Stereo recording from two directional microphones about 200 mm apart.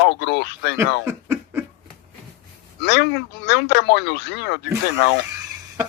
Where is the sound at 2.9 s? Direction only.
55° left (ahead or behind).